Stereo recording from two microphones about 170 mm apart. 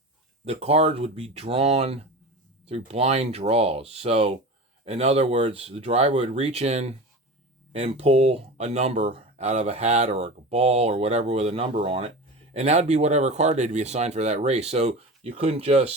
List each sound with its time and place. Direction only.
0.4 s speech: 40° right (ahead or behind)